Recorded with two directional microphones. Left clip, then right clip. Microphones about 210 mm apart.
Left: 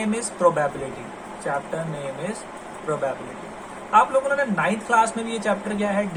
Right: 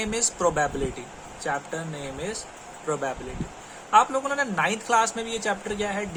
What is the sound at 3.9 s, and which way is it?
A man's voice, 30° right (ahead or behind).